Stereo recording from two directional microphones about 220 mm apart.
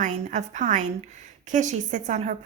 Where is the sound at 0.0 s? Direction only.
35° right (ahead or behind).